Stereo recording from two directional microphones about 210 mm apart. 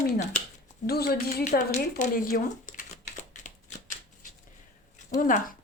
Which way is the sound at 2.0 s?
45° left (ahead or behind).